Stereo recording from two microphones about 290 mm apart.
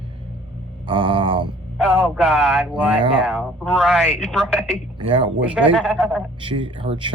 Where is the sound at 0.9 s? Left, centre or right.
Centre.